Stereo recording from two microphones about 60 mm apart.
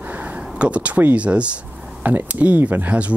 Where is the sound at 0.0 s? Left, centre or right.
Right.